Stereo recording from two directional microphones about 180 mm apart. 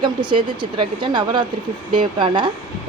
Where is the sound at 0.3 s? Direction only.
25° right (ahead or behind).